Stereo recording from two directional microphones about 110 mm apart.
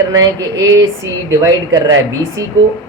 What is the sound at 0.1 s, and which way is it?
A man's voice, 35° right (ahead or behind).